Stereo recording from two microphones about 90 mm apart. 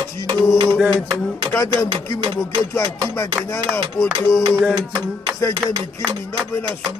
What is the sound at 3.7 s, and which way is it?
Speech, 30° left (ahead or behind).